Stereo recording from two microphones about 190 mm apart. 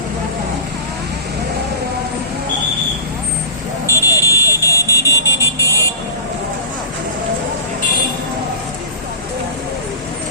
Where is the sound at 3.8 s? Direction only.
15° left (ahead or behind).